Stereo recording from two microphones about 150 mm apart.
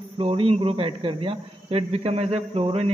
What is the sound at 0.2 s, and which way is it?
Speech, 40° right (ahead or behind).